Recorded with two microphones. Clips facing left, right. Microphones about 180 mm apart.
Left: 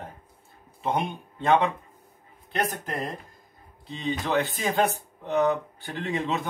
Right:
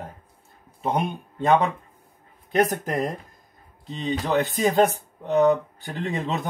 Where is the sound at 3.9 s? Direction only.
40° right (ahead or behind).